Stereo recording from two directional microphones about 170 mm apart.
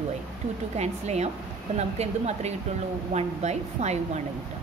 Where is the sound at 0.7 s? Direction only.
40° right (ahead or behind).